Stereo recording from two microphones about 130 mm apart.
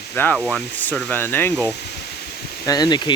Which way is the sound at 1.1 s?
15° left (ahead or behind).